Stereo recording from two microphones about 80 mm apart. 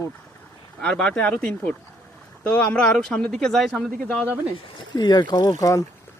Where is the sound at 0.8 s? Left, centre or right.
Centre.